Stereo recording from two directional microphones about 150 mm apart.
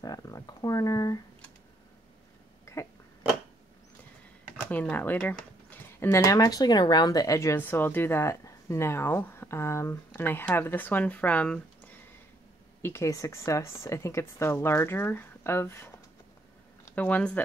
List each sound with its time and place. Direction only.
0.0 s speech: 25° left (ahead or behind)
2.6 s a sound: 20° left (ahead or behind)
4.6 s speech: 10° left (ahead or behind)
12.8 s speech: 20° left (ahead or behind)